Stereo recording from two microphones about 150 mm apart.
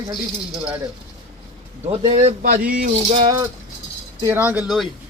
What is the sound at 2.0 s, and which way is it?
Speech, 45° right (ahead or behind).